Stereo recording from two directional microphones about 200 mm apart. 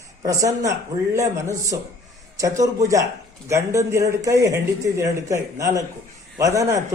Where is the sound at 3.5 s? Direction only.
15° right (ahead or behind).